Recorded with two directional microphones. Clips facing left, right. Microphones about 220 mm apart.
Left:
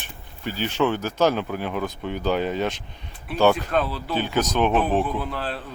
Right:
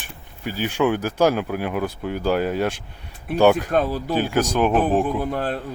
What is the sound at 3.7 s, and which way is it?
Speech, 45° right (ahead or behind).